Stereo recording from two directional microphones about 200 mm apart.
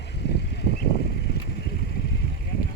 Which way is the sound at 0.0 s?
60° left (ahead or behind).